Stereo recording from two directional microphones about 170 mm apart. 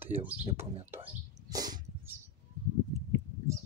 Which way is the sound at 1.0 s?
20° right (ahead or behind).